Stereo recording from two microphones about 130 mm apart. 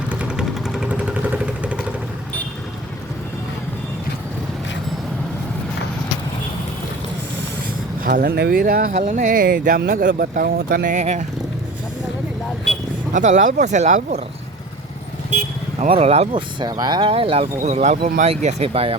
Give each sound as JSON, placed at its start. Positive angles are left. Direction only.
{"t": 0.1, "sound": "vehicle", "side_deg": -10}
{"t": 8.0, "sound": "speech", "side_deg": -90}
{"t": 13.1, "sound": "speech", "side_deg": -75}
{"t": 15.9, "sound": "speech", "side_deg": -50}
{"t": 16.3, "sound": "speech", "side_deg": -35}
{"t": 17.6, "sound": "speech", "side_deg": -60}